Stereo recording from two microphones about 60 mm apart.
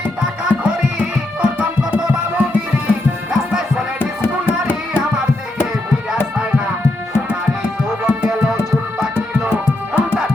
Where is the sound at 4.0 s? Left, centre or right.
Left.